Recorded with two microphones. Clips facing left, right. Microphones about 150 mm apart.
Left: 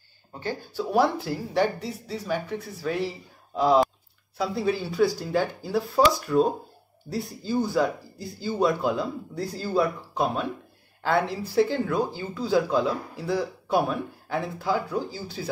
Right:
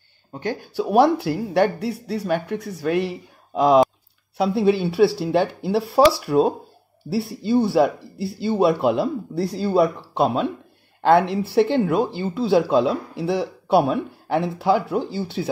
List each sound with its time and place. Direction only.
0.7 s speech: 70° right (ahead or behind)
4.4 s speech: 75° right (ahead or behind)